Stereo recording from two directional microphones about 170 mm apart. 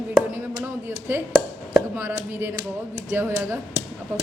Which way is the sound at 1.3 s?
5° right (ahead or behind).